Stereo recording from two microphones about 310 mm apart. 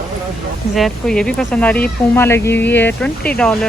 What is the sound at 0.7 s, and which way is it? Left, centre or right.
Speech, centre.